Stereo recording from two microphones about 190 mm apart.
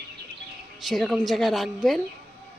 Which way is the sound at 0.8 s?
Centre (ahead or behind).